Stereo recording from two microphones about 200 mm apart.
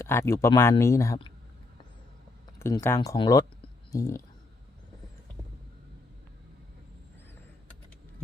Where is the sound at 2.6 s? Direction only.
15° left (ahead or behind).